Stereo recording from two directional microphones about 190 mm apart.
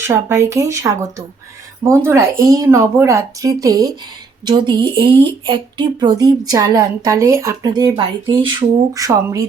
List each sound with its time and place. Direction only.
0.1 s speech: 15° right (ahead or behind)